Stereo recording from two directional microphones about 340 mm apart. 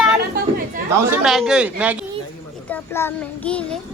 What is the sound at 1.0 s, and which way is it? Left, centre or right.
Speech, centre.